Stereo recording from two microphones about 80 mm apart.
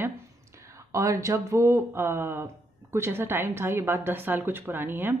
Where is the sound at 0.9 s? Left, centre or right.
Right.